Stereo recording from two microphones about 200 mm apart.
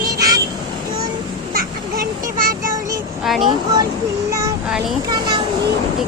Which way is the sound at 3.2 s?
Centre (ahead or behind).